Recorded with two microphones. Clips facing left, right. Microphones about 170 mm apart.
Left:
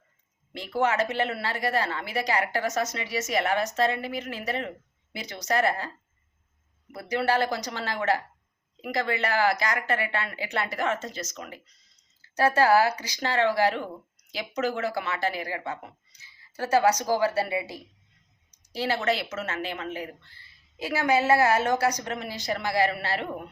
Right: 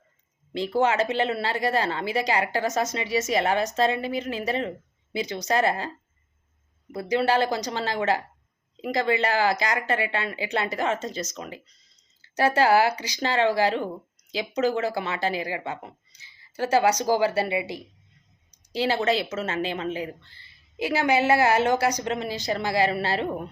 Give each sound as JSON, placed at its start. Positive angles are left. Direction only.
{"t": 0.8, "sound": "a woman's voice", "side_deg": -25}
{"t": 6.9, "sound": "a woman's voice", "side_deg": -20}
{"t": 19.0, "sound": "a woman's voice", "side_deg": -25}